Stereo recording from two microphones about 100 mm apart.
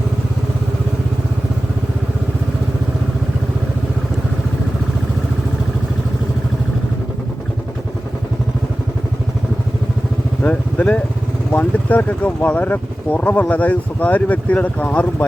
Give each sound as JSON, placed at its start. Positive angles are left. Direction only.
{"t": 10.4, "sound": "speech", "side_deg": 15}